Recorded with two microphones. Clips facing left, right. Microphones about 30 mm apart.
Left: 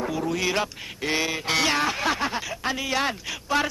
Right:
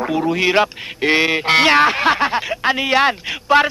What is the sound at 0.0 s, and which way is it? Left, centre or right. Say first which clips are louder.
A man's voice: right 8 dB; right.